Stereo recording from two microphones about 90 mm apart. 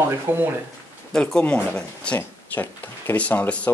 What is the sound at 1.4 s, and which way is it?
Speech, 20° left (ahead or behind).